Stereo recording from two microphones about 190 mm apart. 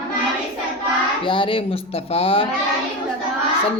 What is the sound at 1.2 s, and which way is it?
Speech, 25° left (ahead or behind).